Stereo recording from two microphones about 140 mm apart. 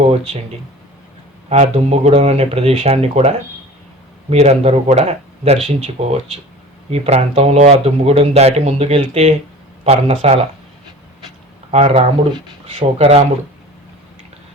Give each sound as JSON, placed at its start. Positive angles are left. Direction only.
{"t": 1.5, "sound": "speech", "side_deg": -50}
{"t": 11.7, "sound": "speech", "side_deg": -50}